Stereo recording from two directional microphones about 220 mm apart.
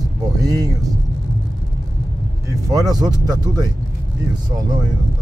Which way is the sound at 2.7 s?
15° right (ahead or behind).